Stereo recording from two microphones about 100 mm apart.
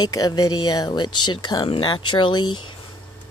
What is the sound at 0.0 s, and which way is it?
Speech, 40° left (ahead or behind).